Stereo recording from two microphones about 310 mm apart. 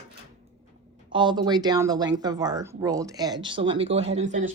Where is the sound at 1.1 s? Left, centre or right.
Centre.